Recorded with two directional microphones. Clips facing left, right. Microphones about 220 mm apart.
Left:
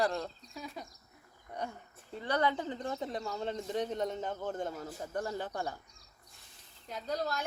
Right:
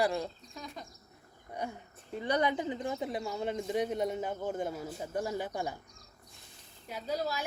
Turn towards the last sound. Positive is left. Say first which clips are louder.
# right 1 dB
turn(degrees=-5)  # may be behind; listen again after turning